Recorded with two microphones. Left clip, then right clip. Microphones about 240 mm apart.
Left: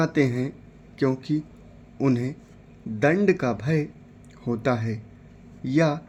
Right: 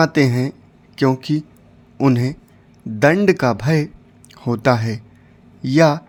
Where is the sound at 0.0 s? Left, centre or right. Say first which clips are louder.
Right 7 dB; right.